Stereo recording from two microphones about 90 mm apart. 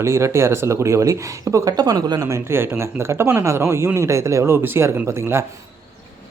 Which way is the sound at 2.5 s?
25° right (ahead or behind).